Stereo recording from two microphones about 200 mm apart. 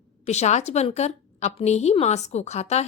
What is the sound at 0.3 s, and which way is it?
A woman's voice, 35° left (ahead or behind).